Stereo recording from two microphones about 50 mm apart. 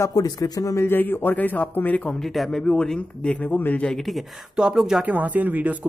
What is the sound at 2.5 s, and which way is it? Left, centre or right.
Speech, centre.